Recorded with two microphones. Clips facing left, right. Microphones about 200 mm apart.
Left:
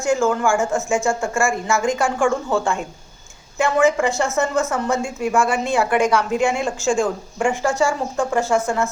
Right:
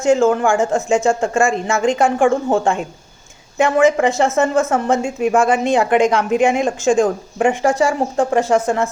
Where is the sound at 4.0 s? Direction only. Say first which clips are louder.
Right 4 dB; 25° right (ahead or behind).